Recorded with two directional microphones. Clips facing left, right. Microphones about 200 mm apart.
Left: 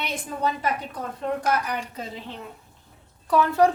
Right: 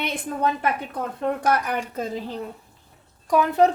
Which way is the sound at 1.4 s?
55° right (ahead or behind).